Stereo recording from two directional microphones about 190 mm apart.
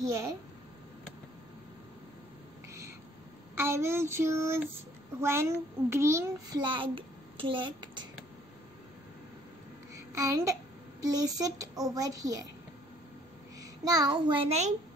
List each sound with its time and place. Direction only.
3.5 s child singing: 15° right (ahead or behind)
5.2 s a child's voice: 15° right (ahead or behind)
9.9 s child singing: 15° right (ahead or behind)
11.0 s a child's voice: 20° right (ahead or behind)
13.6 s a child's voice: 20° right (ahead or behind)